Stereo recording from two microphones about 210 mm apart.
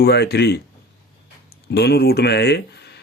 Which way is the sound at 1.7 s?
50° left (ahead or behind).